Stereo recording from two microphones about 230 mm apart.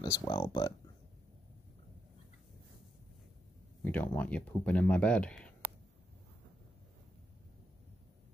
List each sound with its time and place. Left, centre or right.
0.0 s speech: centre
3.8 s speech: centre